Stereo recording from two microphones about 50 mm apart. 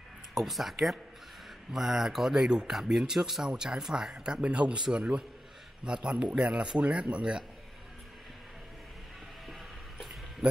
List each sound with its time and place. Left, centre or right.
0.3 s speech: centre; by 7.4 s right
9.5 s vehicle: centre
10.4 s speech: right